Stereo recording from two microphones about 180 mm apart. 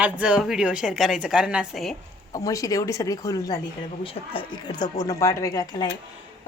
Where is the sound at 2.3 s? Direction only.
20° left (ahead or behind).